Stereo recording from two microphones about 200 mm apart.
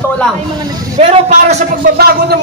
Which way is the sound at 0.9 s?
35° right (ahead or behind).